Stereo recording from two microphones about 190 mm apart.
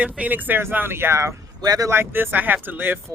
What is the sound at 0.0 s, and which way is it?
Speech, 10° right (ahead or behind).